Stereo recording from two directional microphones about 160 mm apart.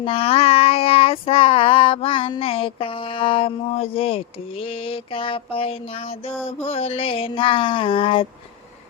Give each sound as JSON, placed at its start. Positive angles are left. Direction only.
{"t": 0.0, "sound": "child singing", "side_deg": 35}